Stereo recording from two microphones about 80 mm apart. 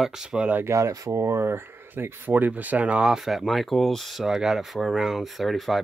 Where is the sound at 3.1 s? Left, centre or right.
Centre.